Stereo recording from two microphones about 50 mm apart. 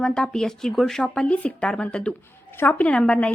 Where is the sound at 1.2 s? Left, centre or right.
Left.